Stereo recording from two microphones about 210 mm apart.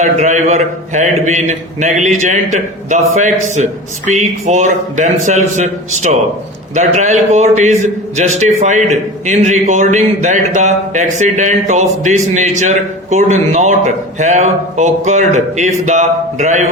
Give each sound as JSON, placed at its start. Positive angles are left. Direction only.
{"t": 0.0, "sound": "a man's voice", "side_deg": -35}